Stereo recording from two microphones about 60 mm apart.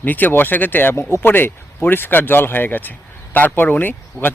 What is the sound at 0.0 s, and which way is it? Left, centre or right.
Speech, left.